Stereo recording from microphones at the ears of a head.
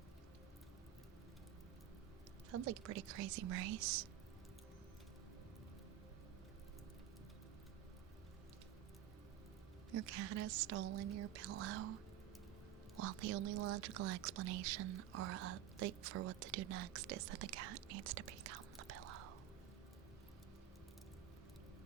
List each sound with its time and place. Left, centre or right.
2.5 s speech: right
9.9 s speech: right
13.0 s speech: right